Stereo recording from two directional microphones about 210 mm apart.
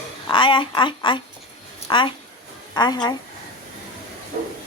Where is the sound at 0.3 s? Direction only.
25° left (ahead or behind).